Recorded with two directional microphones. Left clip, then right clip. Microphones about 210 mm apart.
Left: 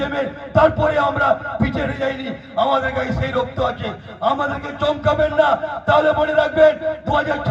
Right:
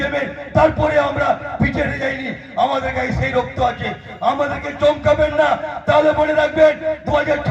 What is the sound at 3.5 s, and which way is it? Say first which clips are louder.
A man's voice: right 3 dB; 35° right (ahead or behind).